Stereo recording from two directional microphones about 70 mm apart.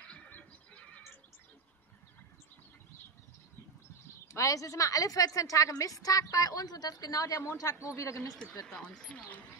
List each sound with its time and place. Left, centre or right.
0.0 s neigh: centre
4.3 s a woman's voice: left
8.6 s speech: centre